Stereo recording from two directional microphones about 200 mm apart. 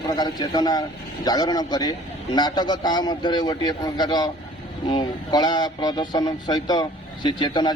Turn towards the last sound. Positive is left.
turn(degrees=25)  # may be behind; listen again after turning